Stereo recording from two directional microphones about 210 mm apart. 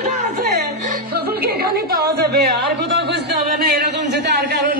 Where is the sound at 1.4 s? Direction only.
50° right (ahead or behind).